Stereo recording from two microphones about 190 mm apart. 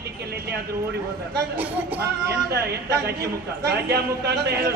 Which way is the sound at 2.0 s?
60° right (ahead or behind).